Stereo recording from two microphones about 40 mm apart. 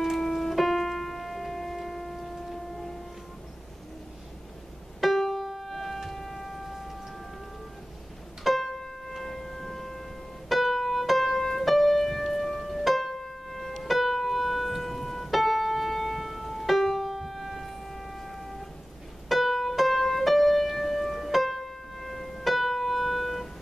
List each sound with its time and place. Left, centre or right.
0.2 s piano: centre
5.0 s music: centre
6.0 s a sound: centre
8.5 s music: centre
10.5 s piano: centre
19.2 s music: centre